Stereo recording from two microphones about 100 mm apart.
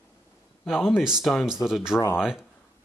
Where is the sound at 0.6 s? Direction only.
Centre (ahead or behind).